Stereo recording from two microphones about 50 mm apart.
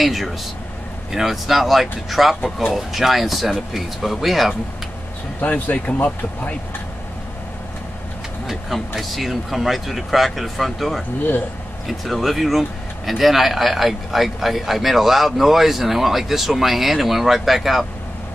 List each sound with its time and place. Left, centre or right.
0.0 s a man's voice: centre
5.4 s speech: left
8.5 s a man's voice: centre